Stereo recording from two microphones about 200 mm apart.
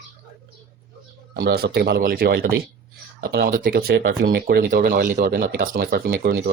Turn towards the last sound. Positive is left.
turn(degrees=-55)  # may be behind; listen again after turning